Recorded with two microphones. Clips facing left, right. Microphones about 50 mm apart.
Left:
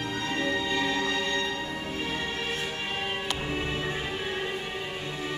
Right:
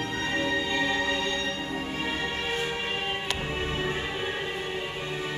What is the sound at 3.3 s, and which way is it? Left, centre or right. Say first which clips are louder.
Music: even; centre.